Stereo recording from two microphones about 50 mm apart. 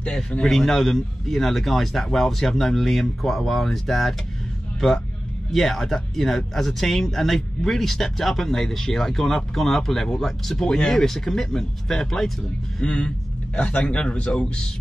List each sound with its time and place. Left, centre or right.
0.4 s speech: centre
12.8 s a man's voice: left